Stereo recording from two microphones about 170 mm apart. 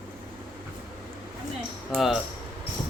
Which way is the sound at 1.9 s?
Centre (ahead or behind).